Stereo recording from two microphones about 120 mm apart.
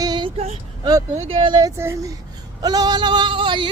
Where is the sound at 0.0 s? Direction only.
35° right (ahead or behind).